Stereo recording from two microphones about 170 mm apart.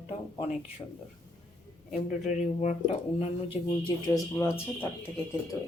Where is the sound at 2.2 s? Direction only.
45° left (ahead or behind).